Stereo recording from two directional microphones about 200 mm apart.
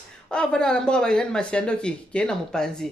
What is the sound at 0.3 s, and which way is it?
Speech, 5° left (ahead or behind).